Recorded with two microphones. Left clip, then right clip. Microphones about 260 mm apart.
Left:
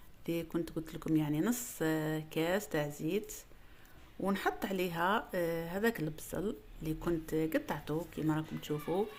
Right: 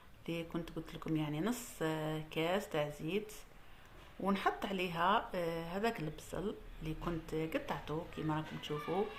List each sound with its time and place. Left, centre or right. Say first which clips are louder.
0.3 s speech: left 5 dB; left